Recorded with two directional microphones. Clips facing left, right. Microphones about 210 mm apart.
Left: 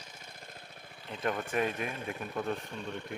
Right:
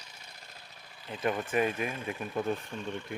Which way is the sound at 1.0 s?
5° right (ahead or behind).